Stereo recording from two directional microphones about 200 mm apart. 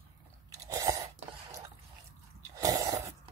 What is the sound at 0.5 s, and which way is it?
Chewing, 15° right (ahead or behind).